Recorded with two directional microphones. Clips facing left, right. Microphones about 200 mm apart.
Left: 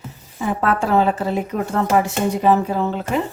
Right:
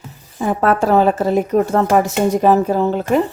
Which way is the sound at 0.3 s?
40° right (ahead or behind).